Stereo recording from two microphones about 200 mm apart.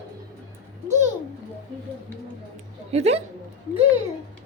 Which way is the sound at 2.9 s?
30° right (ahead or behind).